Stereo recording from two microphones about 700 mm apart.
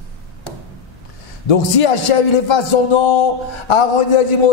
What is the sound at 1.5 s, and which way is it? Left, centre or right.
A man's voice, left.